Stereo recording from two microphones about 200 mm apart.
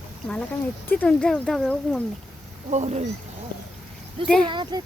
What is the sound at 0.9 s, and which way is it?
Speech, 5° left (ahead or behind).